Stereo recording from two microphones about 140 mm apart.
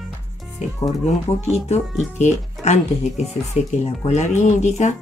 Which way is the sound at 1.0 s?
50° left (ahead or behind).